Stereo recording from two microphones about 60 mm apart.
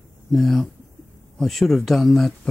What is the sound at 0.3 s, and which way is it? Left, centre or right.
Speech, centre.